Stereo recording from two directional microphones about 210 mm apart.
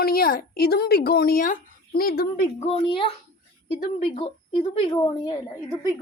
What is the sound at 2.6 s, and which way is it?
Speech, 25° left (ahead or behind).